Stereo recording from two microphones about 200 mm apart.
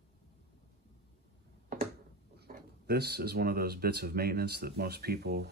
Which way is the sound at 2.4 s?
55° right (ahead or behind).